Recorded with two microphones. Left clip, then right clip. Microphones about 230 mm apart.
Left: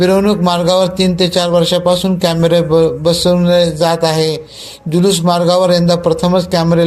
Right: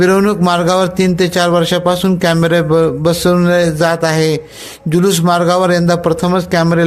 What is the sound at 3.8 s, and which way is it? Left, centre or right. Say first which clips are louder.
A man's voice: even; right.